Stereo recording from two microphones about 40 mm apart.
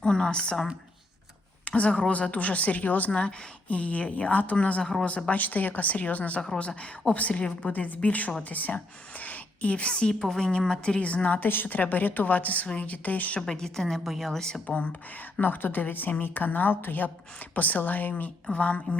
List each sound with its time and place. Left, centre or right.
0.0 s speech: left
1.6 s speech: left
3.1 s speech: left
3.7 s speech: left
6.6 s a woman's voice: left
10.2 s a woman's voice: centre
10.8 s speech: left
11.4 s a woman's voice: left
13.4 s a woman's voice: centre
15.4 s a woman's voice: left